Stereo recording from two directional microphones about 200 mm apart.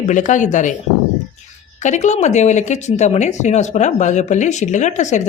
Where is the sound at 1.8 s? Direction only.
35° left (ahead or behind).